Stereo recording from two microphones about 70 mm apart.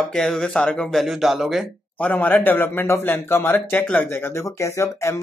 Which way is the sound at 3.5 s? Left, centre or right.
Left.